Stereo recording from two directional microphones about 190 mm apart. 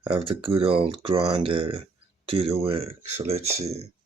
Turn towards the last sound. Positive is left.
turn(degrees=-35)  # may be behind; listen again after turning